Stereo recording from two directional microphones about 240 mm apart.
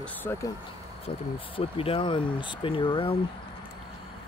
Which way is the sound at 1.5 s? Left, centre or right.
Left.